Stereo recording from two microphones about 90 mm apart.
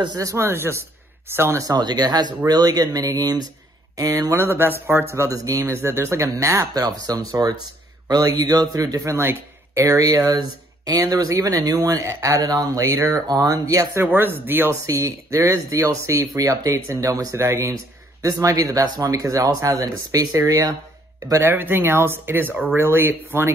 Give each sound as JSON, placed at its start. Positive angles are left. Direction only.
{"t": 0.2, "sound": "speech", "side_deg": -30}
{"t": 1.7, "sound": "speech", "side_deg": -50}
{"t": 6.7, "sound": "speech", "side_deg": -45}
{"t": 9.2, "sound": "speech", "side_deg": -30}
{"t": 14.0, "sound": "speech", "side_deg": -25}
{"t": 14.7, "sound": "speech", "side_deg": -35}
{"t": 21.3, "sound": "speech", "side_deg": -25}